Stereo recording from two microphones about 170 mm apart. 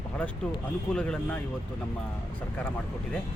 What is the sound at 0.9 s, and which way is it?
Speech, 5° left (ahead or behind).